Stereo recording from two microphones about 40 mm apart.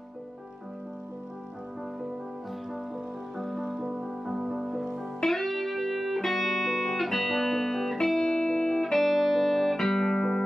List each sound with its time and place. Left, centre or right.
3.3 s music: centre
3.6 s music: centre
5.2 s music: centre
8.4 s music: centre
8.9 s music: centre